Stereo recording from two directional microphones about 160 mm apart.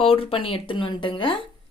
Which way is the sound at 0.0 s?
35° left (ahead or behind).